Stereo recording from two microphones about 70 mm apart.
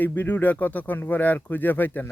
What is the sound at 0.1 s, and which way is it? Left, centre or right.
Speech, left.